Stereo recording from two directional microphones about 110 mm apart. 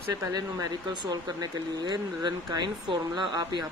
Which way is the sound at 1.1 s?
40° right (ahead or behind).